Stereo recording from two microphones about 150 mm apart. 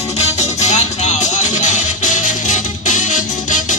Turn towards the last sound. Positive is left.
turn(degrees=55)  # may be behind; listen again after turning